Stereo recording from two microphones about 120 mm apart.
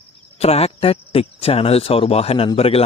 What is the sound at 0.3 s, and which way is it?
Speech, 60° left (ahead or behind).